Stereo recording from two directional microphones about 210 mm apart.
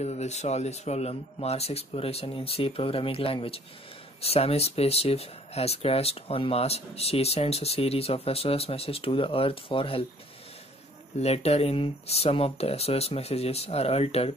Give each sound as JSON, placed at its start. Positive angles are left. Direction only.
{"t": 0.0, "sound": "speech", "side_deg": 30}
{"t": 11.1, "sound": "speech", "side_deg": 30}